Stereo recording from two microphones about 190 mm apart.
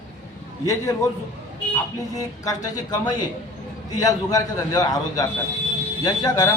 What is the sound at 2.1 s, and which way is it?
Speech, 20° left (ahead or behind).